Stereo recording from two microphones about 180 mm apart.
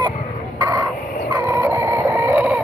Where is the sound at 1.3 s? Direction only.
15° right (ahead or behind).